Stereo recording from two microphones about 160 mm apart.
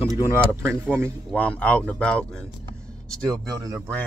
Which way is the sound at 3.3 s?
25° right (ahead or behind).